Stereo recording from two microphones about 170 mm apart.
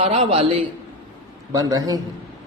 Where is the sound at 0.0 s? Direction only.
35° right (ahead or behind).